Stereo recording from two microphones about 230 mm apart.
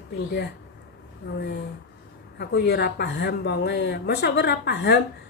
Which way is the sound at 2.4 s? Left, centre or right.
Left.